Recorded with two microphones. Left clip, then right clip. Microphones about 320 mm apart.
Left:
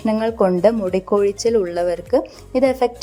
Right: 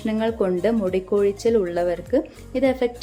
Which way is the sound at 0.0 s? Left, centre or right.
Centre.